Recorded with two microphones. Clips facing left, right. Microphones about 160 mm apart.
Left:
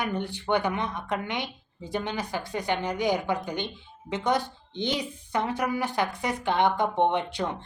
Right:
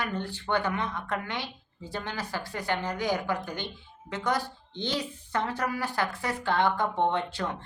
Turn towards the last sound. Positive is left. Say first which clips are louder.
# left 3 dB
turn(degrees=15)  # may be behind; listen again after turning